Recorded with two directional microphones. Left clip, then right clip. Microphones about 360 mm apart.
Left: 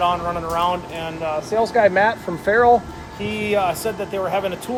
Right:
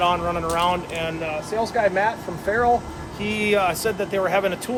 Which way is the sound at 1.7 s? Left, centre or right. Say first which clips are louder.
Left 5 dB; left.